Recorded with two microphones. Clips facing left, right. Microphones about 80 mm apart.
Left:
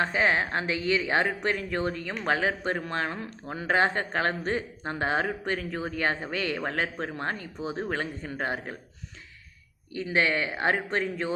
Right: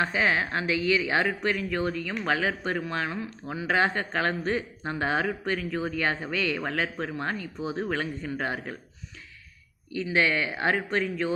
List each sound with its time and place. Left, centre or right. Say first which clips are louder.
0.0 s a man's voice: even; left
2.8 s a man's voice: even; left
9.9 s speech: right 1 dB; left